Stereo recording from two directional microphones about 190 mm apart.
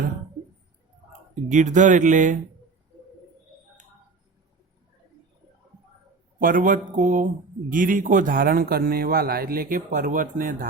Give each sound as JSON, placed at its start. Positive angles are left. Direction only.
{"t": 1.5, "sound": "speech", "side_deg": -40}
{"t": 6.4, "sound": "a man's voice", "side_deg": -45}